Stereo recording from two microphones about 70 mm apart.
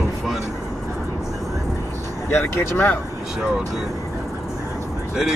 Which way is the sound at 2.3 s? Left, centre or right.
Left.